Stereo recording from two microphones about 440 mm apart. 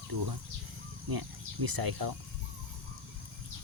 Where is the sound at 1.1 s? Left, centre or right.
Right.